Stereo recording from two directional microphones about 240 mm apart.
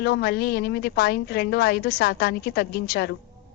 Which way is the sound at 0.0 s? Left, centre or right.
Left.